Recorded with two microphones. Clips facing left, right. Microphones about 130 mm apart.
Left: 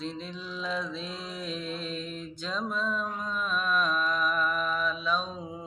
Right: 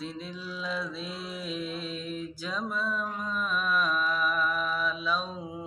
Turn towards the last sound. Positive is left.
turn(degrees=-5)  # may be behind; listen again after turning